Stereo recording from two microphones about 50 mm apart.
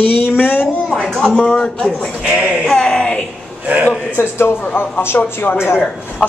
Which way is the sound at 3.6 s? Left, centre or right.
Right.